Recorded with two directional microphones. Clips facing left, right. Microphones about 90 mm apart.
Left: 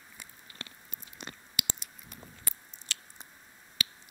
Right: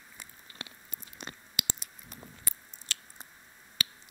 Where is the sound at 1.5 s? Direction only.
40° right (ahead or behind).